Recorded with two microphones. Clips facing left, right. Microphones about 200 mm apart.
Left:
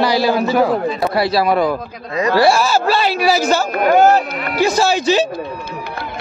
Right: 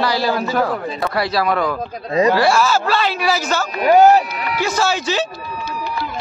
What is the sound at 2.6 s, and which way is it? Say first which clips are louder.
Speech: left 2 dB; 10° left (ahead or behind).